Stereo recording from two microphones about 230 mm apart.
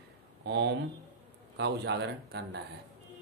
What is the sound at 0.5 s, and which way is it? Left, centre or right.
Speech, right.